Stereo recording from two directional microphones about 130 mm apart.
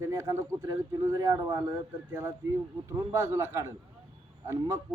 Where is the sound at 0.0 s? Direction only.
25° right (ahead or behind).